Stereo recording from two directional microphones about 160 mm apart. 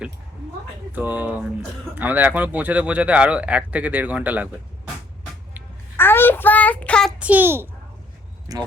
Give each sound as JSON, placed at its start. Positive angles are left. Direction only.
{"t": 0.9, "sound": "speech", "side_deg": -10}
{"t": 6.0, "sound": "child singing", "side_deg": 15}
{"t": 7.2, "sound": "speech", "side_deg": -10}